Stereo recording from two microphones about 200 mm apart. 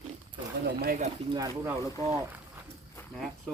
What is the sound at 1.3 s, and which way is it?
Speech, 20° right (ahead or behind).